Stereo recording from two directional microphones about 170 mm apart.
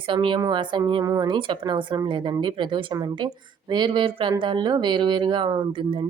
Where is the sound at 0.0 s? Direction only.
30° right (ahead or behind).